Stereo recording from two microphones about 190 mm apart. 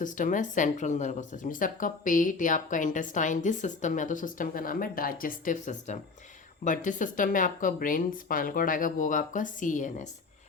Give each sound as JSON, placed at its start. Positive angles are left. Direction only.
{"t": 0.0, "sound": "speech", "side_deg": 45}